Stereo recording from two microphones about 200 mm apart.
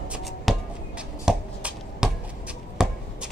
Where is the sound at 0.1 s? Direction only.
5° right (ahead or behind).